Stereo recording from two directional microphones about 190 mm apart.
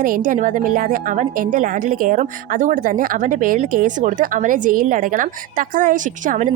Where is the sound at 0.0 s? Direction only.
45° right (ahead or behind).